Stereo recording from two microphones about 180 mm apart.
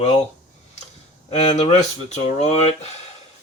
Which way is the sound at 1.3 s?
40° left (ahead or behind).